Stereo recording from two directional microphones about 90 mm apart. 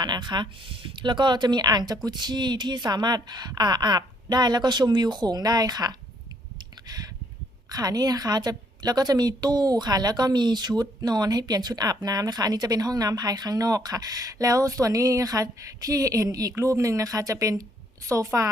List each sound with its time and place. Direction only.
0.0 s a woman's voice: 55° right (ahead or behind)
6.8 s a sound: 45° right (ahead or behind)
7.7 s a woman's voice: 45° right (ahead or behind)